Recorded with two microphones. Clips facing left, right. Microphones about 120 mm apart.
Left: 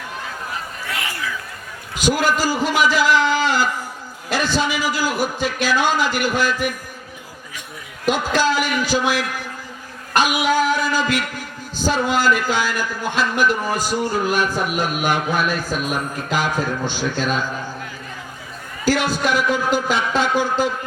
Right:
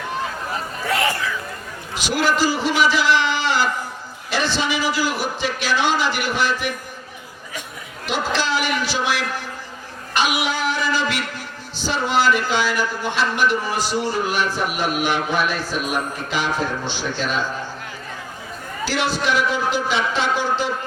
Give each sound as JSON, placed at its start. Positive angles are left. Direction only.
{"t": 2.0, "sound": "a man's voice", "side_deg": 45}
{"t": 8.0, "sound": "a man's voice", "side_deg": 45}
{"t": 10.2, "sound": "music", "side_deg": 45}
{"t": 11.8, "sound": "a man's voice", "side_deg": 45}
{"t": 18.9, "sound": "a man's voice", "side_deg": 45}